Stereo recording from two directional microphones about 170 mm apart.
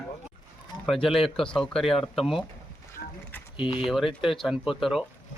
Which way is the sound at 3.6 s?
30° left (ahead or behind).